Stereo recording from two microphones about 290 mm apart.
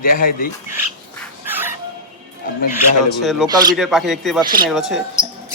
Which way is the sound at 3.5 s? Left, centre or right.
Centre.